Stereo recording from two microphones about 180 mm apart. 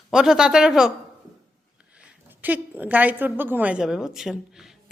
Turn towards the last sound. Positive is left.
turn(degrees=0)  # may be behind; listen again after turning